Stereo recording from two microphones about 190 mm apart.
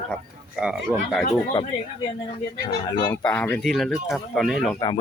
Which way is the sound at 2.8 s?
15° left (ahead or behind).